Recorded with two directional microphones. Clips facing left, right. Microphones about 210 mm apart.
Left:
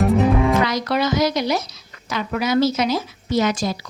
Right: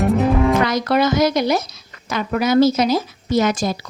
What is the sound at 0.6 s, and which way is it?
A woman's voice, 50° right (ahead or behind).